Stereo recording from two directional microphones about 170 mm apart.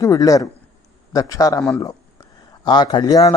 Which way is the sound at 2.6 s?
25° left (ahead or behind).